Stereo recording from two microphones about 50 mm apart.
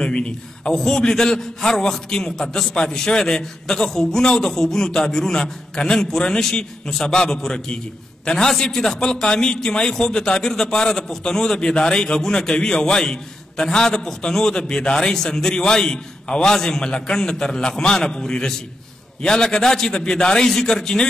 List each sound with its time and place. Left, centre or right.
0.0 s a man's voice: centre